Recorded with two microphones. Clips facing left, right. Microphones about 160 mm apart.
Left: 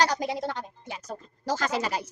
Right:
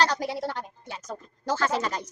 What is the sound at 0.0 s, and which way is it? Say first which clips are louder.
Speech: even; 15° left (ahead or behind).